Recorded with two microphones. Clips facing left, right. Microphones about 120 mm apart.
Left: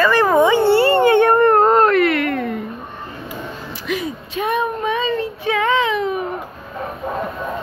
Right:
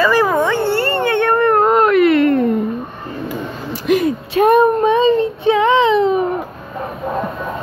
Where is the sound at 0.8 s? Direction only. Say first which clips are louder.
Left 4 dB; 15° left (ahead or behind).